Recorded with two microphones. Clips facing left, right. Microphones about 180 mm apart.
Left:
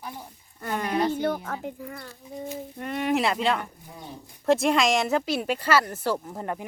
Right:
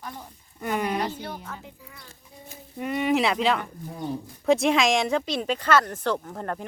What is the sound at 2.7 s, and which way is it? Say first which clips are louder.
Speech: right 2 dB; 5° right (ahead or behind).